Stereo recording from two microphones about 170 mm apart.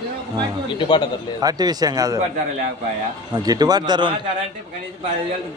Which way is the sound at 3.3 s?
25° right (ahead or behind).